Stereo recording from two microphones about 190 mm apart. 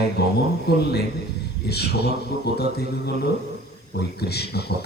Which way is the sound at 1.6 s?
60° left (ahead or behind).